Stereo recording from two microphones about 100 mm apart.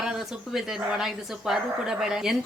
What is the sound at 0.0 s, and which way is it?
Speech, 5° right (ahead or behind).